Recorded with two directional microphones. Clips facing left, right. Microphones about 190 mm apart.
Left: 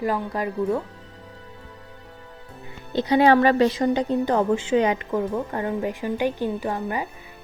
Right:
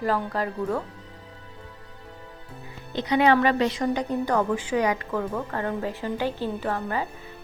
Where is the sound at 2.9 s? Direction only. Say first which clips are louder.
Left 3 dB; 30° left (ahead or behind).